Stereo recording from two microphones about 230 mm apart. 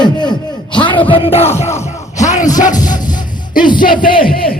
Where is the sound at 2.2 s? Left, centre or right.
Left.